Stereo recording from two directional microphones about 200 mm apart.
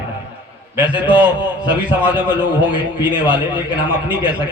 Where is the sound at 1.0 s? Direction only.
10° right (ahead or behind).